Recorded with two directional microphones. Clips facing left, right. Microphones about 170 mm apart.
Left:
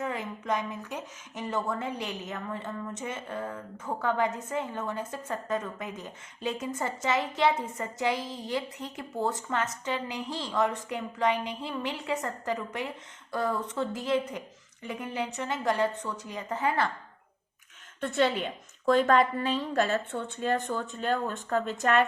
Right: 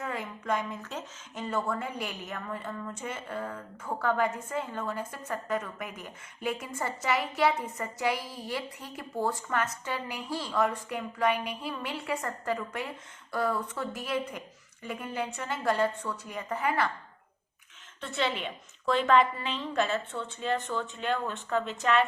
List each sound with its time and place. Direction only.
0.0 s a woman's voice: 20° left (ahead or behind)
18.0 s a woman's voice: 45° left (ahead or behind)